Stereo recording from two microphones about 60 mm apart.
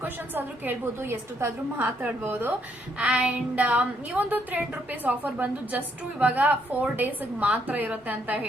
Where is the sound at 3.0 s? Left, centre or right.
Right.